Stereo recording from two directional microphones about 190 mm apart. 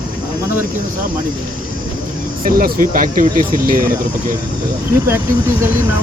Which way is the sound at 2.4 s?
50° right (ahead or behind).